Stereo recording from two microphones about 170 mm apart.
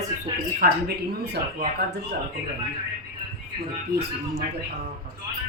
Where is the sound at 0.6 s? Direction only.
60° right (ahead or behind).